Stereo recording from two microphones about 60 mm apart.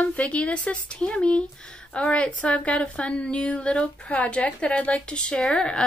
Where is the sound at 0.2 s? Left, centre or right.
Centre.